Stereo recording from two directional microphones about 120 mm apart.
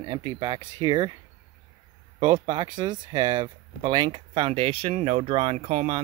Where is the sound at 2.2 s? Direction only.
40° right (ahead or behind).